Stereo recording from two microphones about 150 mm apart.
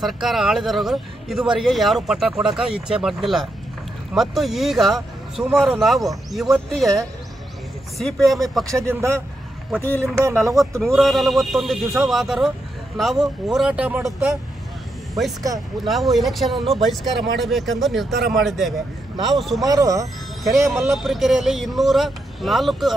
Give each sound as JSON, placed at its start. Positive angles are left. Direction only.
{"t": 0.0, "sound": "a man's voice", "side_deg": 0}
{"t": 8.6, "sound": "speech", "side_deg": -20}
{"t": 10.5, "sound": "a man's voice", "side_deg": 0}
{"t": 15.8, "sound": "a man's voice", "side_deg": 0}
{"t": 19.6, "sound": "speech", "side_deg": -25}
{"t": 20.9, "sound": "a man's voice", "side_deg": 0}